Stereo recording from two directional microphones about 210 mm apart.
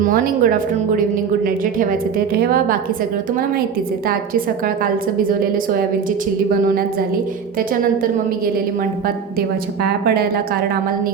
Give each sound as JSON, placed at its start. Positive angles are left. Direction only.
{"t": 0.0, "sound": "a woman's voice", "side_deg": -40}